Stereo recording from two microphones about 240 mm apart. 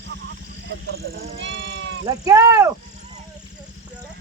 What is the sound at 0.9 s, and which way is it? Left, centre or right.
Speech, right.